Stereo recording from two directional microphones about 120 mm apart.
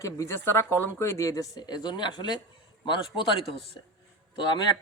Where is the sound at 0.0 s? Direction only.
25° left (ahead or behind); by 3.6 s 45° left (ahead or behind).